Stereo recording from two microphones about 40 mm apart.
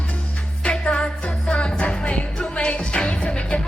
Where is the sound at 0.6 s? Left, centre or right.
Left.